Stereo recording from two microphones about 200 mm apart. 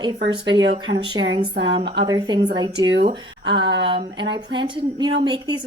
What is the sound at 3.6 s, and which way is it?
Speech, 60° right (ahead or behind).